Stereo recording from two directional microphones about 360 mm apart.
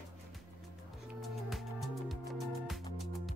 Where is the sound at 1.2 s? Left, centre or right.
Centre.